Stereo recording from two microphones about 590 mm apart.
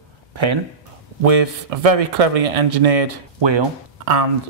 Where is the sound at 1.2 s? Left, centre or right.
Right.